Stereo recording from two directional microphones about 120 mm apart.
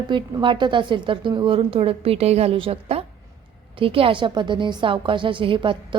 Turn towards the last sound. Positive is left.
turn(degrees=-45)  # may be behind; listen again after turning